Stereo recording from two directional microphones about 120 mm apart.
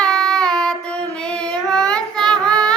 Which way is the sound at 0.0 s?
5° left (ahead or behind).